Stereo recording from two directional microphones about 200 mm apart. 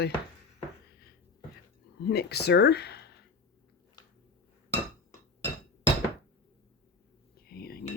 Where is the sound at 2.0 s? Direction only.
55° left (ahead or behind).